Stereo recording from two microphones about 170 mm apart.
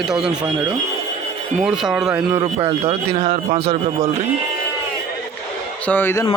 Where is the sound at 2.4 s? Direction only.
35° right (ahead or behind).